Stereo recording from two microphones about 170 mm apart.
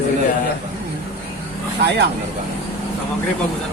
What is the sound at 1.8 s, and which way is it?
Speech, 75° right (ahead or behind).